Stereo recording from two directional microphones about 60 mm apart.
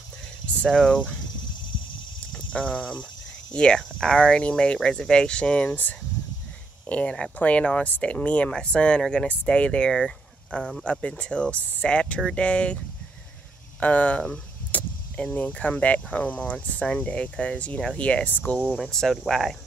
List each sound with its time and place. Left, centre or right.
0.7 s speech: centre
2.3 s speech: centre
5.7 s speech: left
14.7 s vehicle: centre
15.6 s speech: left
18.8 s speech: centre